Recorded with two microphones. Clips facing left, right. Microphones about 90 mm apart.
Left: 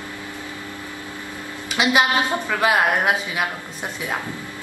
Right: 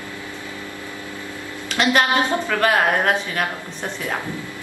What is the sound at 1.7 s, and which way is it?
A woman's voice, 10° left (ahead or behind).